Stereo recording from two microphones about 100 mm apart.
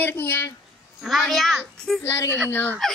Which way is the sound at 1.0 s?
Centre (ahead or behind).